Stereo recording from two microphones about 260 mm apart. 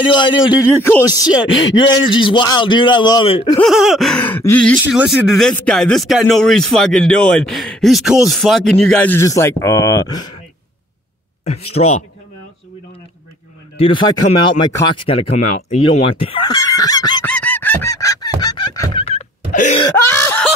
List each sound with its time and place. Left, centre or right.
0.1 s a man's voice: centre
3.6 s speech: centre
11.7 s speech: left
13.7 s speech: centre
17.3 s fowl: centre; by 19.8 s left
19.8 s laughter: centre